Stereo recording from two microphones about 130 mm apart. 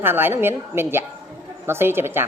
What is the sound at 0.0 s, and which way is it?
A woman's voice, 15° right (ahead or behind).